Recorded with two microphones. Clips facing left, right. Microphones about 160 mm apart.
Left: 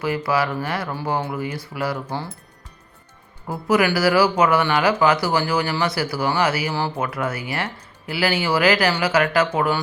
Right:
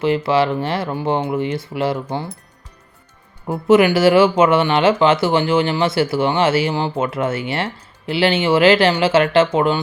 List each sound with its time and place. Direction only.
0.0 s speech: 25° right (ahead or behind)
3.4 s speech: 25° right (ahead or behind)